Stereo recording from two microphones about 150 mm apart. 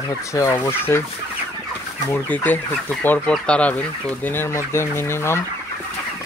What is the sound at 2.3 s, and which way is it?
Speech, 10° left (ahead or behind).